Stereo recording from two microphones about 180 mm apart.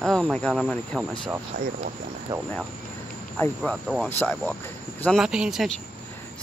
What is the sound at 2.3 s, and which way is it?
Cricket, 15° right (ahead or behind).